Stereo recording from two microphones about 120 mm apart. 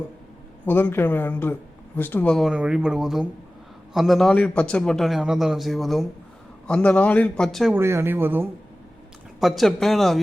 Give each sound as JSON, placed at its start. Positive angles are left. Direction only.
{"t": 0.6, "sound": "speech", "side_deg": 15}
{"t": 2.4, "sound": "a man's voice", "side_deg": -10}
{"t": 7.7, "sound": "speech", "side_deg": -20}
{"t": 9.4, "sound": "a man's voice", "side_deg": 0}